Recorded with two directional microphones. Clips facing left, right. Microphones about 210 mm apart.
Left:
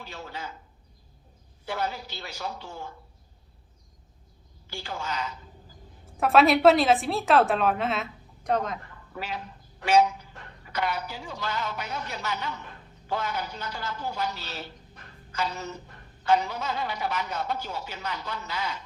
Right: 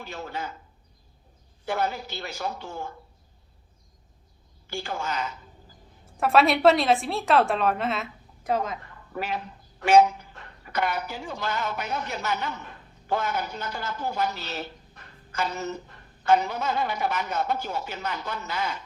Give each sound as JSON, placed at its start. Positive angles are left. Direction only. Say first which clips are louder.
{"t": 0.0, "sound": "speech", "louder": "right 4 dB", "side_deg": -50}
{"t": 1.6, "sound": "speech", "louder": "right 3 dB", "side_deg": -50}
{"t": 4.7, "sound": "speech", "louder": "right 3 dB", "side_deg": -50}
{"t": 6.1, "sound": "a woman's voice", "louder": "left 1 dB", "side_deg": 0}
{"t": 9.1, "sound": "speech", "louder": "right 4 dB", "side_deg": -50}
{"t": 10.7, "sound": "speech", "louder": "right 2 dB", "side_deg": -50}